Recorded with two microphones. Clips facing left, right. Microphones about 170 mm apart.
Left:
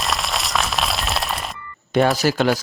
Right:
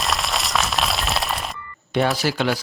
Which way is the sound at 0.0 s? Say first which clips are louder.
Even; centre (ahead or behind).